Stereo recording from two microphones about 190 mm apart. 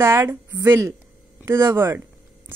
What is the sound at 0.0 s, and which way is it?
A woman's voice, 15° right (ahead or behind).